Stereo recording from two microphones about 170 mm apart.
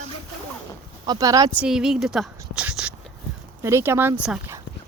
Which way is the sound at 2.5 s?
5° right (ahead or behind).